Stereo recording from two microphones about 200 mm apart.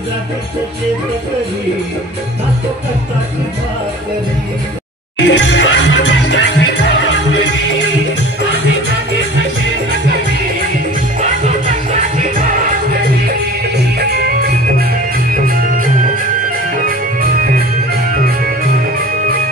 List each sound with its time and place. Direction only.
5.2 s music: 60° left (ahead or behind)
11.4 s music: 35° right (ahead or behind)
13.9 s music: 55° right (ahead or behind)